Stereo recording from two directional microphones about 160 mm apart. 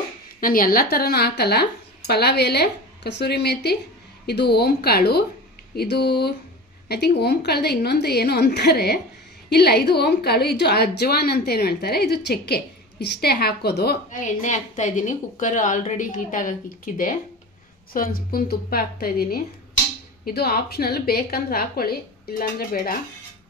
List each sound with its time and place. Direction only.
0.4 s a woman's voice: 60° left (ahead or behind); by 9.0 s 80° left
9.5 s a woman's voice: 90° left
14.2 s a woman's voice: 50° left (ahead or behind)